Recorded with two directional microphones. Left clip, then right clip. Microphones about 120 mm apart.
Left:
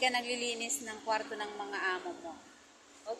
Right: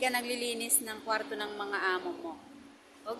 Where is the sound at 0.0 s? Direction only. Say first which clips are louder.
Even; 25° right (ahead or behind).